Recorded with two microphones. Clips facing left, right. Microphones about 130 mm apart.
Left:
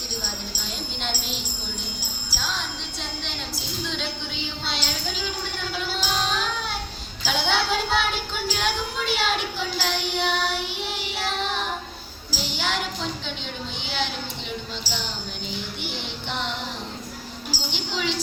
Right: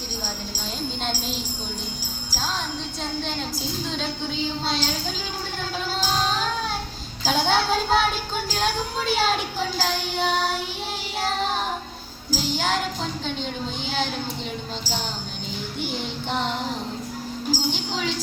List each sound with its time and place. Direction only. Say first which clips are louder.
1.0 s a sound: even; 40° right (ahead or behind)
2.3 s music: right 3 dB; 40° right (ahead or behind)
3.8 s a woman's voice: right 3 dB; 40° right (ahead or behind)
5.9 s music: right 3 dB; 40° right (ahead or behind)
7.2 s a woman's voice: right 3 dB; 40° right (ahead or behind)
11.2 s child singing: right 3 dB; 40° right (ahead or behind)
12.3 s music: right 4 dB; 45° right (ahead or behind)
15.8 s music: right 4 dB; 40° right (ahead or behind)